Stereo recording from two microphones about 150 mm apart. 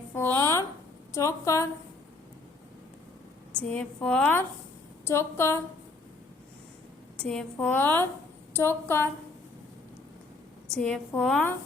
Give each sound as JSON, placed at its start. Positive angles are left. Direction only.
{"t": 0.1, "sound": "a sound", "side_deg": 15}
{"t": 1.1, "sound": "a woman's voice", "side_deg": 20}
{"t": 3.6, "sound": "a woman's voice", "side_deg": 10}
{"t": 7.2, "sound": "a woman's voice", "side_deg": 5}
{"t": 10.7, "sound": "a woman's voice", "side_deg": 5}